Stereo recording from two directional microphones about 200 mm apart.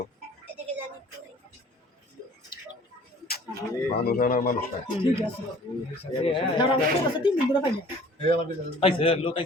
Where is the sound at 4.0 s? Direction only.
50° left (ahead or behind).